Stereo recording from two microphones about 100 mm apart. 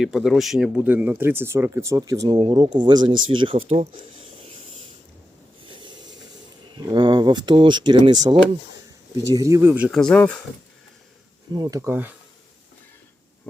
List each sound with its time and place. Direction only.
0.0 s speech: 5° right (ahead or behind)
0.8 s speech: 15° right (ahead or behind); by 3.8 s 60° right (ahead or behind)
4.2 s a sound: 80° right
5.6 s a sound: 50° right (ahead or behind)
6.7 s speech: 50° right (ahead or behind)
9.2 s speech: 35° right (ahead or behind)
9.9 s speech: 5° left (ahead or behind)
11.5 s speech: 45° right (ahead or behind)
11.9 s speech: 20° right (ahead or behind)